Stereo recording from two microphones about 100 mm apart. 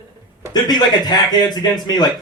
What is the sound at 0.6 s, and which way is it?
A man's voice, 45° left (ahead or behind).